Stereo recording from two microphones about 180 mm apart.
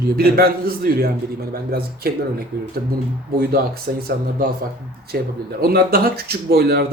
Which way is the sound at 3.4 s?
55° right (ahead or behind).